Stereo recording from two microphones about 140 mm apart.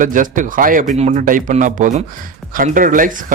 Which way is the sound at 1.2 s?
75° right (ahead or behind).